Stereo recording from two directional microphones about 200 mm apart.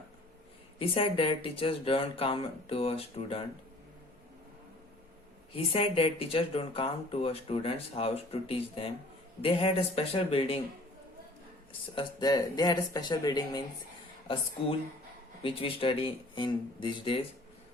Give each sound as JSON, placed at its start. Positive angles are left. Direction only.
{"t": 0.8, "sound": "speech", "side_deg": 25}
{"t": 5.5, "sound": "speech", "side_deg": 30}
{"t": 11.9, "sound": "speech", "side_deg": 20}
{"t": 15.4, "sound": "speech", "side_deg": 25}